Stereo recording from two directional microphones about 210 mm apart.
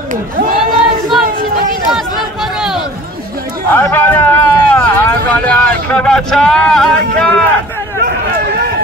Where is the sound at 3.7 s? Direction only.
10° left (ahead or behind).